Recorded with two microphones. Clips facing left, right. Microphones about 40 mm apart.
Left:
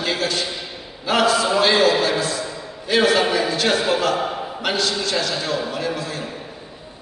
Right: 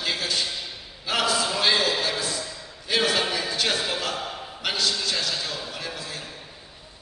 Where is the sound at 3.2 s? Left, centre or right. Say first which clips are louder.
Left 7 dB; centre.